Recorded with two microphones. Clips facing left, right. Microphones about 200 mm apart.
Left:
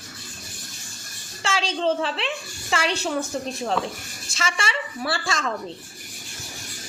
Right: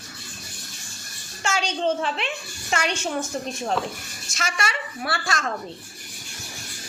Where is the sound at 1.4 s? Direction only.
30° left (ahead or behind).